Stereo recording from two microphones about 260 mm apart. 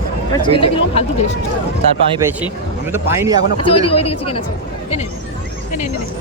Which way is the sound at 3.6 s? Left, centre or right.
Left.